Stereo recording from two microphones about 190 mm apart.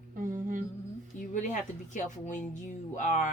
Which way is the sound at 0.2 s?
45° right (ahead or behind).